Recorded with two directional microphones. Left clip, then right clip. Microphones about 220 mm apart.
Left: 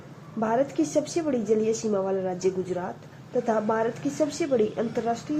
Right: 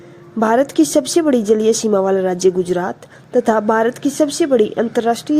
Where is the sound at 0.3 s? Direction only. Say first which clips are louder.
Right 11 dB; 45° right (ahead or behind).